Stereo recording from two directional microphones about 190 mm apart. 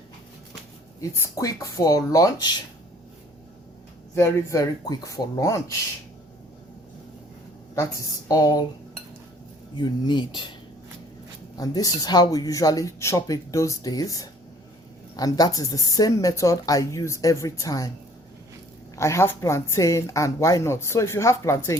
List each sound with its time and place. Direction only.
1.1 s speech: 15° left (ahead or behind)
4.1 s speech: 15° left (ahead or behind)
7.8 s speech: 20° left (ahead or behind)
9.7 s speech: 25° left (ahead or behind)
11.5 s speech: 20° left (ahead or behind)
18.9 s speech: 15° left (ahead or behind)